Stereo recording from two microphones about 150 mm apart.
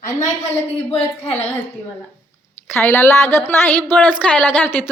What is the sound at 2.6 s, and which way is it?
A woman's voice, 15° left (ahead or behind).